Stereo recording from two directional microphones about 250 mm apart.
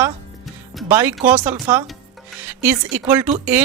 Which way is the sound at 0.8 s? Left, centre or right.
Centre.